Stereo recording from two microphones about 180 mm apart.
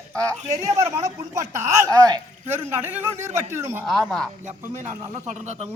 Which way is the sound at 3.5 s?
15° right (ahead or behind).